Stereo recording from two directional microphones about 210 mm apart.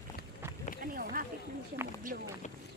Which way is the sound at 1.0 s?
45° right (ahead or behind).